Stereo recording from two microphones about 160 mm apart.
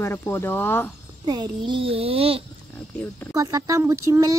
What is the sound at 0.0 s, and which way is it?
Speech, 15° left (ahead or behind).